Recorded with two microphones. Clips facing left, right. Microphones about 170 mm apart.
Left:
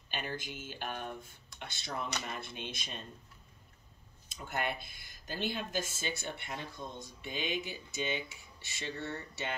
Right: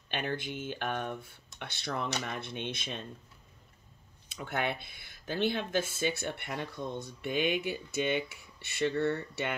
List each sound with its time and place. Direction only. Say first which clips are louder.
0.1 s speech: right 5 dB; 60° right (ahead or behind)
4.3 s speech: right 3 dB; 60° right (ahead or behind)